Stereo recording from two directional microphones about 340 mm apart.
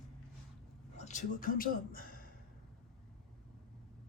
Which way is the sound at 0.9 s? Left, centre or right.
Centre.